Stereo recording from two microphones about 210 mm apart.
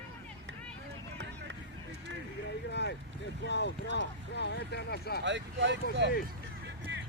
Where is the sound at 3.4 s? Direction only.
55° left (ahead or behind).